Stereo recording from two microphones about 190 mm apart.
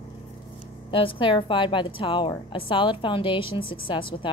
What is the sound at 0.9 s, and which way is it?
A woman's voice, 30° left (ahead or behind).